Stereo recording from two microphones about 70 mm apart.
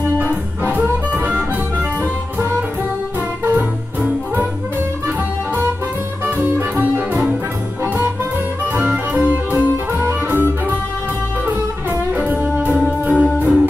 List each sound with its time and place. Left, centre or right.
0.3 s music: right
3.4 s music: right
6.6 s music: right
8.7 s music: right